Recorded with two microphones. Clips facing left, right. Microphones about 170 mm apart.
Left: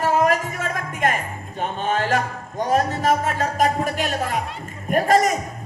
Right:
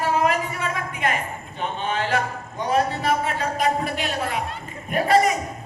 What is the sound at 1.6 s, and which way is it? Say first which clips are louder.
Speech: left 3 dB; 45° left (ahead or behind).